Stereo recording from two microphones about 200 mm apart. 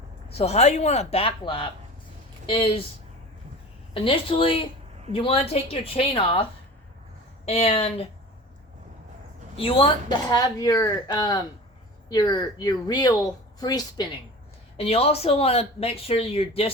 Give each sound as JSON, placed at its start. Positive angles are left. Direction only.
{"t": 0.3, "sound": "speech", "side_deg": 30}
{"t": 3.9, "sound": "speech", "side_deg": 25}
{"t": 9.6, "sound": "speech", "side_deg": 25}
{"t": 14.8, "sound": "speech", "side_deg": 30}